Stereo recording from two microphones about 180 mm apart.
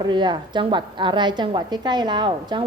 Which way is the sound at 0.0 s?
25° right (ahead or behind).